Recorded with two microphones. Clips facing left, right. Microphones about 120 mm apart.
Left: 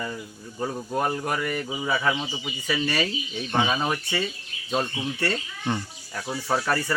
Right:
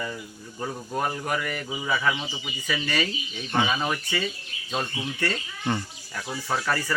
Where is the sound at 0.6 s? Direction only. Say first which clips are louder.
Left 2 dB; 10° left (ahead or behind).